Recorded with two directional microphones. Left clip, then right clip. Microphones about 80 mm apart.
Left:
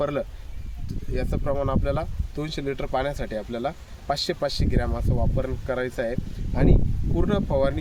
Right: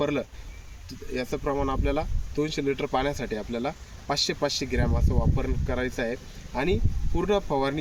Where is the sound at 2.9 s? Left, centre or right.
Left.